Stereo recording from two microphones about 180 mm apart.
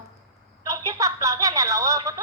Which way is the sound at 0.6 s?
20° right (ahead or behind).